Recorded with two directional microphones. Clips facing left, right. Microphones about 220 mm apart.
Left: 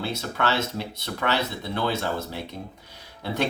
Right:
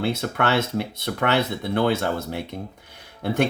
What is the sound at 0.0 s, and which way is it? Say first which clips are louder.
Speech: right 4 dB; 55° right (ahead or behind).